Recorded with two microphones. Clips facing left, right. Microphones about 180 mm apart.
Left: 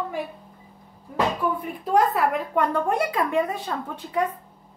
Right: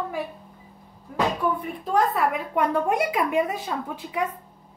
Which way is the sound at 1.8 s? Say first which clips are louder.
Left 2 dB; centre (ahead or behind).